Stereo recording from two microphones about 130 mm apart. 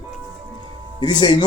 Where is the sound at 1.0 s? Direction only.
35° left (ahead or behind).